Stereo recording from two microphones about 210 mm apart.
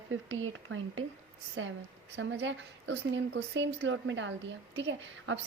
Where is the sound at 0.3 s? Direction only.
70° right (ahead or behind).